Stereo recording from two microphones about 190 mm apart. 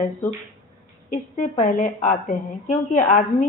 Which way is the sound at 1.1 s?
40° left (ahead or behind).